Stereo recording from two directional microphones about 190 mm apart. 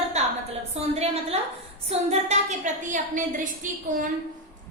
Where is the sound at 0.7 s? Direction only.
35° right (ahead or behind).